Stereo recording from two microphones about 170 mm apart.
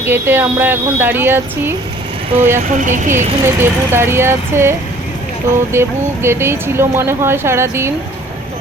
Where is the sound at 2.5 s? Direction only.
50° right (ahead or behind).